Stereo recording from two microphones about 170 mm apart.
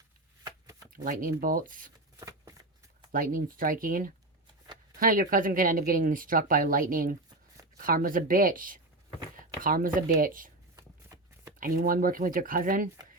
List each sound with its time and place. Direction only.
0.4 s shuffling cards: 20° right (ahead or behind)
0.9 s speech: 55° right (ahead or behind)
2.1 s a sound: 20° right (ahead or behind)
3.1 s speech: 55° right (ahead or behind)
10.8 s shuffling cards: 20° right (ahead or behind)
11.6 s speech: 55° right (ahead or behind)